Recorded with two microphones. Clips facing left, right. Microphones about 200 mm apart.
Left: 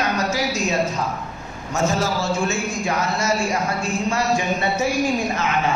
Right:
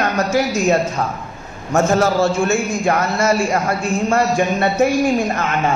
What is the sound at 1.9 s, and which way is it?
Speech, 55° right (ahead or behind).